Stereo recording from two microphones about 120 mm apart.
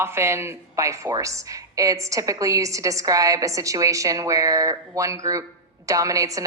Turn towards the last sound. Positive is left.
turn(degrees=-30)  # may be behind; listen again after turning